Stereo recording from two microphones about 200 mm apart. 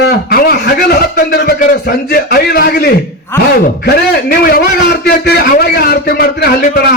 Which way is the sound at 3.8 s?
50° left (ahead or behind).